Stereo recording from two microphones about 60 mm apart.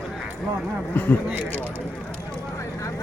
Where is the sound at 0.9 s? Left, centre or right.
Left.